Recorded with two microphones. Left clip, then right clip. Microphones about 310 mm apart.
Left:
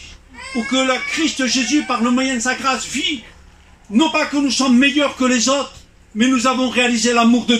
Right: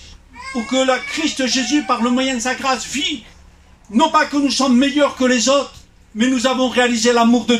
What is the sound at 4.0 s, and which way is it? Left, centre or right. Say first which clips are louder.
Speech: right 2 dB; right.